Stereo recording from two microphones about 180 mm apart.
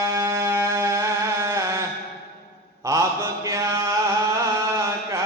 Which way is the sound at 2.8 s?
15° right (ahead or behind).